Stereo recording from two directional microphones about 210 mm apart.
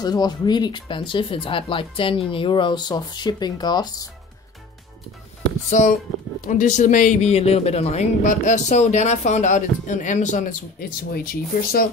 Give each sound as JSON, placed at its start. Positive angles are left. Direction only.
{"t": 0.0, "sound": "speech", "side_deg": 20}
{"t": 5.7, "sound": "speech", "side_deg": 35}